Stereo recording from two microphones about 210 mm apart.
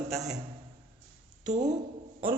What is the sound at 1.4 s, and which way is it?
Speech, 35° right (ahead or behind).